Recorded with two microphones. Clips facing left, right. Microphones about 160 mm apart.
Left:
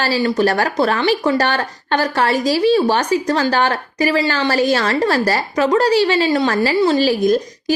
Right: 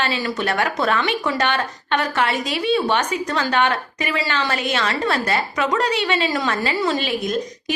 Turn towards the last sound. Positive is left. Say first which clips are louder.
# left 8 dB
turn(degrees=35)  # may be behind; listen again after turning